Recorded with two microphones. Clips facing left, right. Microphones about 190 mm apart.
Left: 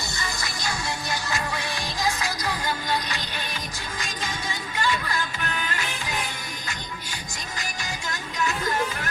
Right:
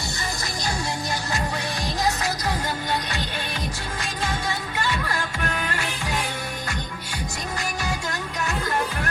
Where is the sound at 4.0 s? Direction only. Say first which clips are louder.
Right 5 dB; 60° right (ahead or behind).